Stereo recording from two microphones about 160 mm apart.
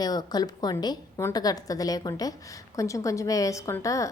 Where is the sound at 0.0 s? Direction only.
25° left (ahead or behind).